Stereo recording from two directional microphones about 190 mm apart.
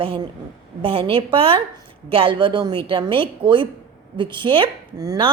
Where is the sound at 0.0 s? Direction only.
30° right (ahead or behind).